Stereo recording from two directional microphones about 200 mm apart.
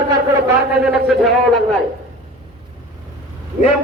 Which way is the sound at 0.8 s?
Centre (ahead or behind).